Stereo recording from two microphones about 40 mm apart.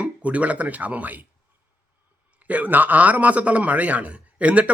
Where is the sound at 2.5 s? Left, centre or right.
Right.